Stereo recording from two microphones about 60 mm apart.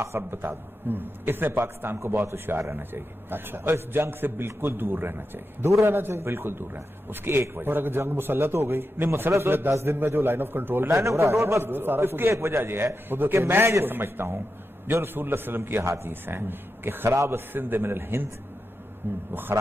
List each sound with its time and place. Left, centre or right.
0.0 s a man's voice: right
9.9 s a man's voice: right
10.9 s a man's voice: right
19.3 s a man's voice: right